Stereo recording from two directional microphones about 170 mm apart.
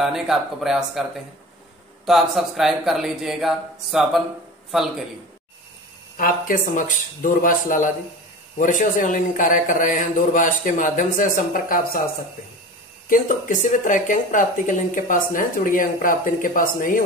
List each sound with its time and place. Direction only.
0.0 s a man's voice: centre (ahead or behind)
2.0 s a man's voice: centre (ahead or behind)
6.1 s speech: 55° left (ahead or behind)
13.1 s speech: 50° left (ahead or behind)